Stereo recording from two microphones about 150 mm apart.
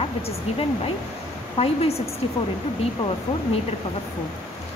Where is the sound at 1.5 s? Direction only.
40° left (ahead or behind).